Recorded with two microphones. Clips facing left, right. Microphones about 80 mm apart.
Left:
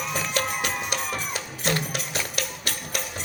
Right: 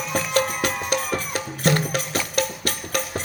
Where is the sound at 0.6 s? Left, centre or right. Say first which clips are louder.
Right 4 dB; right.